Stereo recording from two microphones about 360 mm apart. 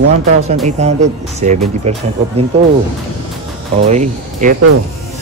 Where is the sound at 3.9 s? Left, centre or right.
Centre.